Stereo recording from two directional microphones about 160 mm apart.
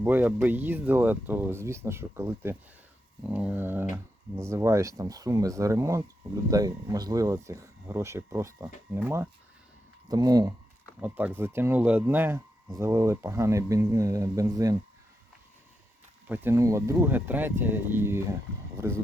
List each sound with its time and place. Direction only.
0.0 s speech: 10° right (ahead or behind)
10.1 s speech: 25° right (ahead or behind)
11.0 s speech: 10° right (ahead or behind)
16.2 s speech: 15° right (ahead or behind)